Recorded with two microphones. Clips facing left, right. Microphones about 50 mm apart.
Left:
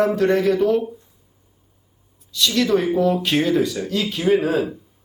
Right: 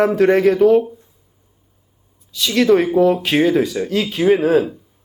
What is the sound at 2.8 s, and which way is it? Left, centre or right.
A man's voice, centre.